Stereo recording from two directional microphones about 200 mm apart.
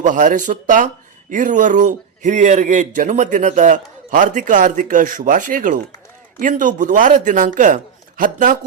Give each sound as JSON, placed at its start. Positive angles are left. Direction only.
{"t": 0.0, "sound": "a man's voice", "side_deg": -40}